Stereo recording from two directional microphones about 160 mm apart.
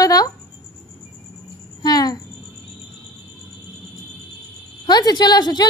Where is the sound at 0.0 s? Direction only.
20° left (ahead or behind).